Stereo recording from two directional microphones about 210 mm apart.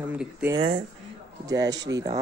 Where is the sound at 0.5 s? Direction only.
25° right (ahead or behind).